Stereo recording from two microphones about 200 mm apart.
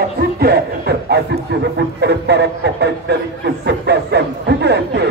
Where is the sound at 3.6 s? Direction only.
60° right (ahead or behind).